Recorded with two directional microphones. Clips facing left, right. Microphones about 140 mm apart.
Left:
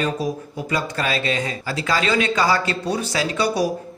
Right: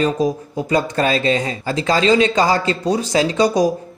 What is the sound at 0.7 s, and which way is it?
Speech, 40° right (ahead or behind).